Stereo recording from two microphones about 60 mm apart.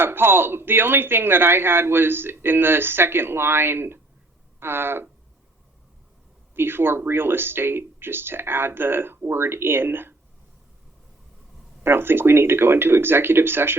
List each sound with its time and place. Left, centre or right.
0.0 s speech: right
6.5 s speech: right
11.8 s speech: right